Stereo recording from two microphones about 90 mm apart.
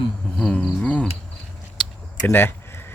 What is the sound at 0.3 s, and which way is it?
Insect, 15° left (ahead or behind).